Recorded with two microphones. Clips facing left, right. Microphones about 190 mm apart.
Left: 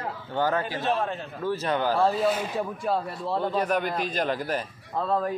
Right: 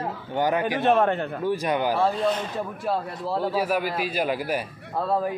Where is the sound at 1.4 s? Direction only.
15° right (ahead or behind).